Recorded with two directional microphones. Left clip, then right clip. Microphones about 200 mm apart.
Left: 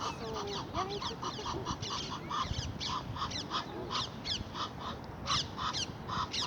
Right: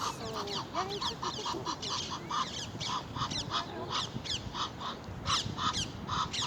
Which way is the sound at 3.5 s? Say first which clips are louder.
Right 1 dB; 25° right (ahead or behind).